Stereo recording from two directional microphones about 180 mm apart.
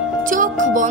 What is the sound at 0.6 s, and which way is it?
Speech, 45° right (ahead or behind).